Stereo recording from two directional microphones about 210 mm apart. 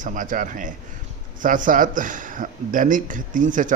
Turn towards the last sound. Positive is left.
turn(degrees=-40)  # may be behind; listen again after turning